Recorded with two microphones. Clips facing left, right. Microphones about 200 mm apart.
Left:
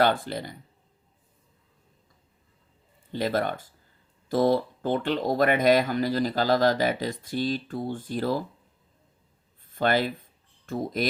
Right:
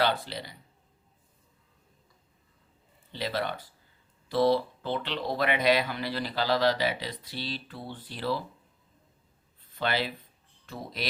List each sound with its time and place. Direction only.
0.0 s speech: 50° left (ahead or behind)
3.1 s speech: 50° left (ahead or behind)
9.6 s speech: 45° left (ahead or behind)